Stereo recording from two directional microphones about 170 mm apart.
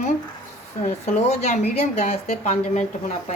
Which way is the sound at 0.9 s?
40° left (ahead or behind).